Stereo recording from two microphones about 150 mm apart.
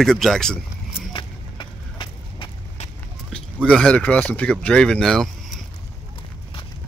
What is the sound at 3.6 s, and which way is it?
Speech, 5° left (ahead or behind).